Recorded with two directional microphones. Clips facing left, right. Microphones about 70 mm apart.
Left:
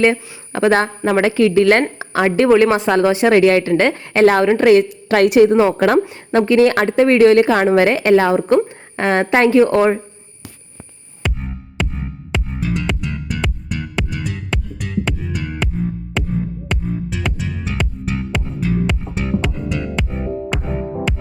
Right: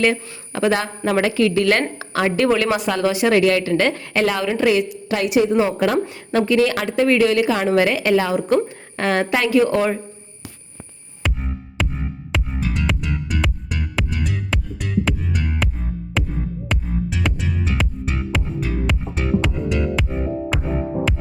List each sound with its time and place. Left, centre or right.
0.0 s a woman's voice: left
4.3 s a woman's voice: left
8.4 s a woman's voice: left
11.2 s music: centre